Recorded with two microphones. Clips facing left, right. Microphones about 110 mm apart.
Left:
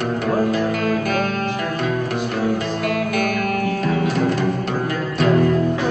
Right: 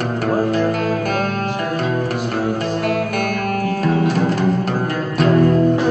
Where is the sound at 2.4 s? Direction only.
50° right (ahead or behind); by 4.9 s 35° right (ahead or behind).